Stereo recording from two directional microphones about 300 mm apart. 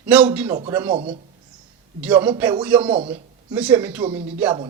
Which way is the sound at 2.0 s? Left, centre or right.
Centre.